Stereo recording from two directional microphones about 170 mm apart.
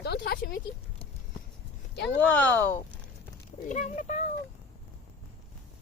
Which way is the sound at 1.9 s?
80° left.